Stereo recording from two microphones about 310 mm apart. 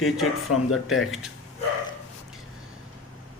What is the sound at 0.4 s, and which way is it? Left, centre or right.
Speech, left.